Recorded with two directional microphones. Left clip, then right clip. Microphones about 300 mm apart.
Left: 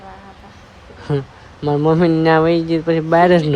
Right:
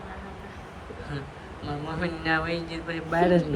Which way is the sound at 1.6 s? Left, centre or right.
Centre.